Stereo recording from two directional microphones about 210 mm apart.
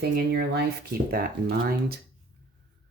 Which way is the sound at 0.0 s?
50° right (ahead or behind).